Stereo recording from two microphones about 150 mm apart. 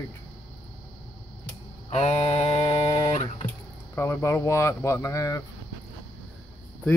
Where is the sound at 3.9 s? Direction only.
20° left (ahead or behind).